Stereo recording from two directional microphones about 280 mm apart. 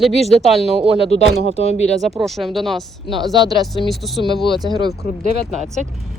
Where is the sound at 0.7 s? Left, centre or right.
Right.